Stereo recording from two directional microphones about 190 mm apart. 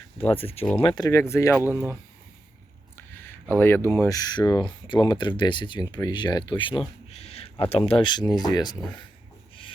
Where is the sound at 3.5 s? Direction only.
10° left (ahead or behind).